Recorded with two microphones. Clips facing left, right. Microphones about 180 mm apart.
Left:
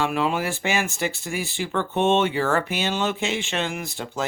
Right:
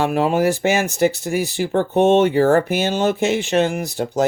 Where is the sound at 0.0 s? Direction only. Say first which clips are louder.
Right 7 dB; 45° right (ahead or behind).